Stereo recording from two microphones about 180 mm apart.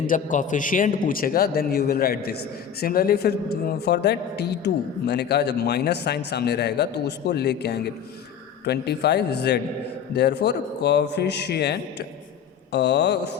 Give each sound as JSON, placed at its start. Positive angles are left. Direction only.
{"t": 0.1, "sound": "a man's voice", "side_deg": 45}